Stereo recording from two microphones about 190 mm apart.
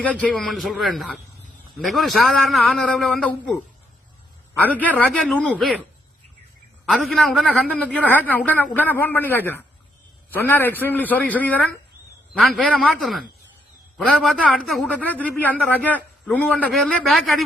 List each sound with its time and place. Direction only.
0.2 s a man's voice: 5° left (ahead or behind)
6.8 s a man's voice: centre (ahead or behind)